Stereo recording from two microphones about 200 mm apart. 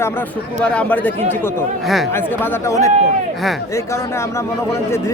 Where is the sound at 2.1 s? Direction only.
10° left (ahead or behind).